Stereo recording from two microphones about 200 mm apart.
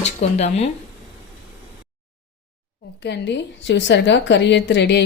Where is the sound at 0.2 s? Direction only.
35° left (ahead or behind).